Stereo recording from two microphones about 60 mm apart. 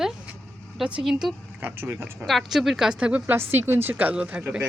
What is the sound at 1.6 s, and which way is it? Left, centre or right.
Speech, right.